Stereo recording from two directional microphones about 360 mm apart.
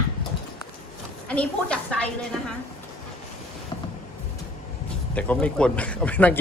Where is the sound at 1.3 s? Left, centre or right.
Centre.